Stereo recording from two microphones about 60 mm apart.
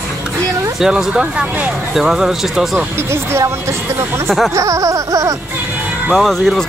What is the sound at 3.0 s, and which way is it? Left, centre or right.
Speech, right.